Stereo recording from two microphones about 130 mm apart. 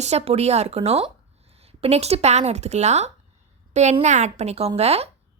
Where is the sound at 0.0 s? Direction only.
55° right (ahead or behind).